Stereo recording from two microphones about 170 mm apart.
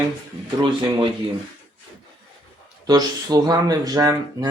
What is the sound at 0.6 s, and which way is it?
Speech, 30° right (ahead or behind).